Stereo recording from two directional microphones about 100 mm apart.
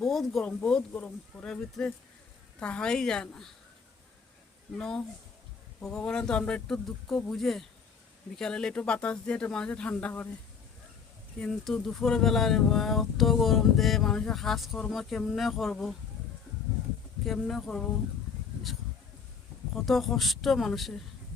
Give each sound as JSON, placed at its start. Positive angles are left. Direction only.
{"t": 0.0, "sound": "speech", "side_deg": 0}
{"t": 0.4, "sound": "speech", "side_deg": 15}
{"t": 4.8, "sound": "speech", "side_deg": 5}
{"t": 11.3, "sound": "speech", "side_deg": 10}
{"t": 17.2, "sound": "speech", "side_deg": 5}
{"t": 19.7, "sound": "speech", "side_deg": 0}